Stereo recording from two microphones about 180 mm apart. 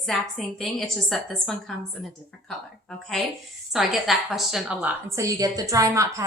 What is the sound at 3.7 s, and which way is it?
A woman's voice, centre (ahead or behind).